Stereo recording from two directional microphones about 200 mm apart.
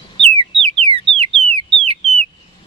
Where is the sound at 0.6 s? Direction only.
30° right (ahead or behind).